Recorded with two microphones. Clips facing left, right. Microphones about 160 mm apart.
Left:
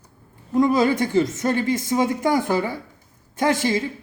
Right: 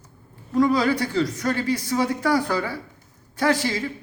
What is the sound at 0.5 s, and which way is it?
A woman's voice, 20° left (ahead or behind).